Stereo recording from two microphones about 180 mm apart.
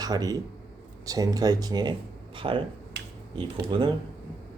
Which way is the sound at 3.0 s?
70° right (ahead or behind).